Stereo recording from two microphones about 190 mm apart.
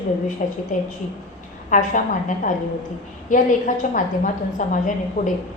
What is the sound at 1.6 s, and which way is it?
A woman's voice, 40° left (ahead or behind).